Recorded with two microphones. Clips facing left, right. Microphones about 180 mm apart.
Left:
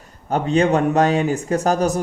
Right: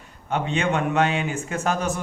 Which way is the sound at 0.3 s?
40° left (ahead or behind).